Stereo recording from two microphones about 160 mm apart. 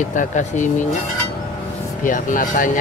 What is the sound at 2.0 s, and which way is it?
Speech, 55° left (ahead or behind).